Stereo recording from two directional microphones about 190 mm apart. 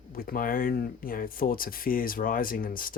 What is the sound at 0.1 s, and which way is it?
Speech, 50° left (ahead or behind).